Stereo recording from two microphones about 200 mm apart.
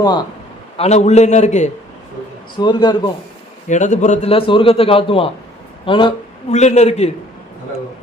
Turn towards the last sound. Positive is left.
turn(degrees=35)  # may be behind; listen again after turning